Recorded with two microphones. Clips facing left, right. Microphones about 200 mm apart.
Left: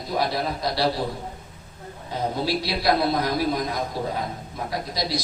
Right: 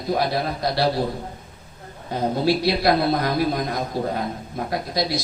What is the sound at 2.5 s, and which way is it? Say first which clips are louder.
A man's voice: right 5 dB; 55° right (ahead or behind).